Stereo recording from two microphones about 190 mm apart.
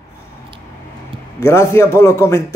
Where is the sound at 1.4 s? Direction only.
15° left (ahead or behind).